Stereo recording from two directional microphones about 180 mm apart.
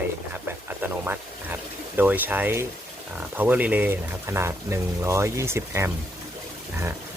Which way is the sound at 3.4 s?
10° right (ahead or behind).